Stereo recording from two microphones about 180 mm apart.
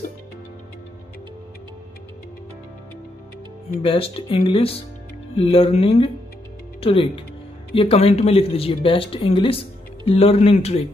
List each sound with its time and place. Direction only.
3.8 s speech: 30° left (ahead or behind)